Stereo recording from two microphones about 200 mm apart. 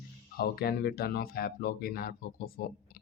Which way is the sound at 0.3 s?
50° left (ahead or behind).